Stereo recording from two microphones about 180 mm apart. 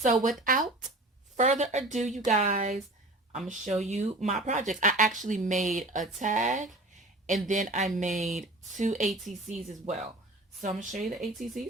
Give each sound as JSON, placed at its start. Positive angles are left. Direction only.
{"t": 0.0, "sound": "speech", "side_deg": -45}
{"t": 11.0, "sound": "speech", "side_deg": 0}